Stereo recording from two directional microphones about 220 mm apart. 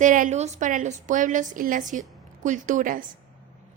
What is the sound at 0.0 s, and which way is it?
Speech, 35° right (ahead or behind).